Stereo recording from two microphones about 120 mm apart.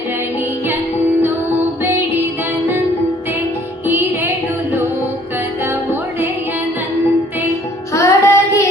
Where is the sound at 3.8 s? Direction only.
20° right (ahead or behind).